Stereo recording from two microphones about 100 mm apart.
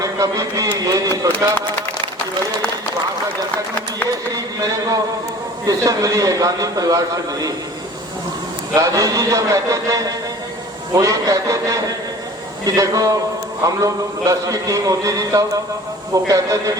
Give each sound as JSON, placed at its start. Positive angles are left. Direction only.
{"t": 0.0, "sound": "a man's voice", "side_deg": -35}
{"t": 4.3, "sound": "a man's voice", "side_deg": -35}
{"t": 8.7, "sound": "a man's voice", "side_deg": -35}